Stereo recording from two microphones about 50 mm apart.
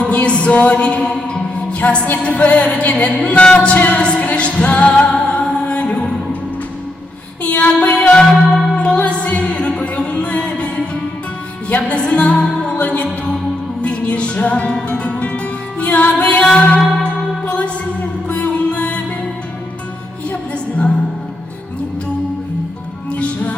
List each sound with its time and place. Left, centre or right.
0.0 s music: left
7.4 s a sound: left
7.7 s music: left
20.3 s music: left
23.1 s music: left